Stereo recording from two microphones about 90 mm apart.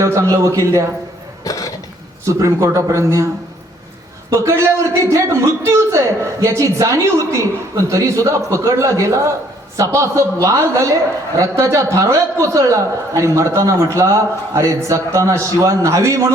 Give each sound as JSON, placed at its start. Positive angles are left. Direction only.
{"t": 0.0, "sound": "a man's voice", "side_deg": -35}
{"t": 1.5, "sound": "a sound", "side_deg": 40}
{"t": 2.2, "sound": "a man's voice", "side_deg": -35}
{"t": 4.3, "sound": "a man's voice", "side_deg": -30}